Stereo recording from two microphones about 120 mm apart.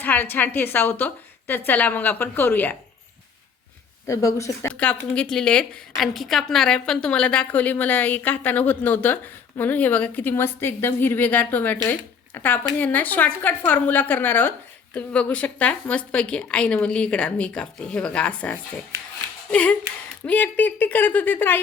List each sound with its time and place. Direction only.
0.0 s a woman's voice: 15° left (ahead or behind)
4.0 s speech: 25° left (ahead or behind)
4.7 s a woman's voice: 10° left (ahead or behind)